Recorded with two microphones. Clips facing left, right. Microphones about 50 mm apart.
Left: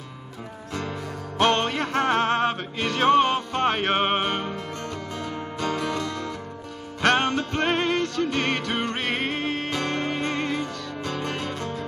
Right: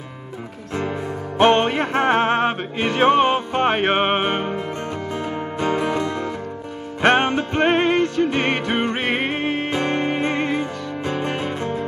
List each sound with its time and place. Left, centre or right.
1.4 s music: right